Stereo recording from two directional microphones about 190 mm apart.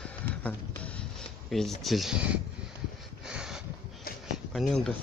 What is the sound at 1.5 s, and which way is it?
Speech, centre (ahead or behind).